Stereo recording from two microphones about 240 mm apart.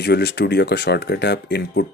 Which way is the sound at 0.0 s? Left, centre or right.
Left.